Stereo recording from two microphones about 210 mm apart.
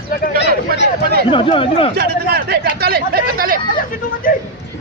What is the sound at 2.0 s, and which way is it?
Speech, 50° right (ahead or behind).